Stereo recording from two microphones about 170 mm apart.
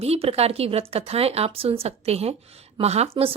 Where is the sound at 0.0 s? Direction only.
35° right (ahead or behind).